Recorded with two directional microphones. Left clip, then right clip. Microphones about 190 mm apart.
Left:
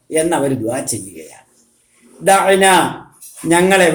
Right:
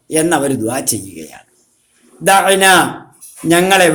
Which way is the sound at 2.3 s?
55° right (ahead or behind).